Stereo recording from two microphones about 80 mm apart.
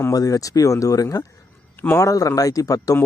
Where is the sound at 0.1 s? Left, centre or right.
Left.